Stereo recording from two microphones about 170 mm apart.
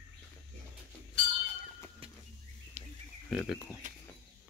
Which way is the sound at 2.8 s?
40° right (ahead or behind).